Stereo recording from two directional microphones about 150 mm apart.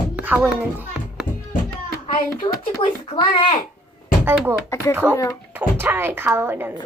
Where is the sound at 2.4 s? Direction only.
35° left (ahead or behind).